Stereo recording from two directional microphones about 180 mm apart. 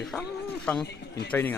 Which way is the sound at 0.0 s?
Centre (ahead or behind).